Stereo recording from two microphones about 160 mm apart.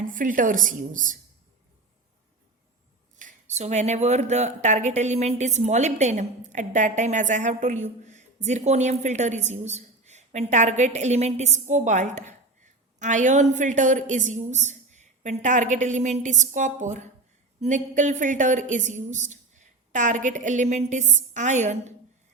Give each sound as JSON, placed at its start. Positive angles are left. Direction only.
{"t": 0.1, "sound": "speech", "side_deg": -55}
{"t": 3.2, "sound": "speech", "side_deg": -50}